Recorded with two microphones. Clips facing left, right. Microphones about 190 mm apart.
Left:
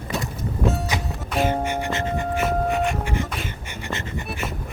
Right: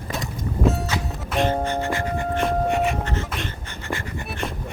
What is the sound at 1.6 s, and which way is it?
Music, 15° left (ahead or behind).